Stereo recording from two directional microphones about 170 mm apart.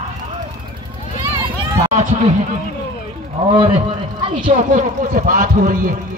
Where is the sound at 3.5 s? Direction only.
30° right (ahead or behind).